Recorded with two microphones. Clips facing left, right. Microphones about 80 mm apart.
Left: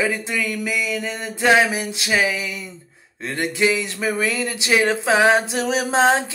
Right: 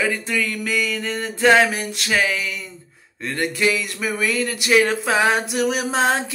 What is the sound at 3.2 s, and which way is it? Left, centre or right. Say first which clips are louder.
Music: left 1 dB; left.